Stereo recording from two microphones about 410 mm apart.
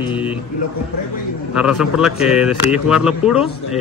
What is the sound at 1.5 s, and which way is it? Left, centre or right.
A man's voice, centre.